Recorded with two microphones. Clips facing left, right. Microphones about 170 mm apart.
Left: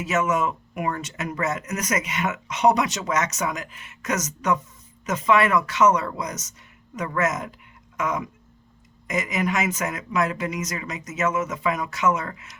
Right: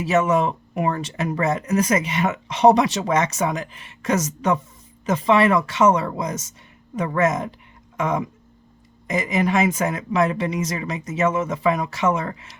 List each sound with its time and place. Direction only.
0.0 s speech: 30° right (ahead or behind)